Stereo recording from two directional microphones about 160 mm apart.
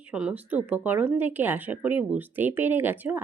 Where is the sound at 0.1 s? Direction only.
5° right (ahead or behind).